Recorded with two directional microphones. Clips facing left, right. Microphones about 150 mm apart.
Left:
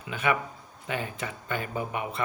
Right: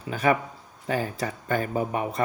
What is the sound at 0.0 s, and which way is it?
Speech, 40° right (ahead or behind).